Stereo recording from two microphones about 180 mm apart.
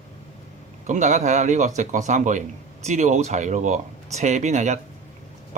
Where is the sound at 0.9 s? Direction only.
40° right (ahead or behind).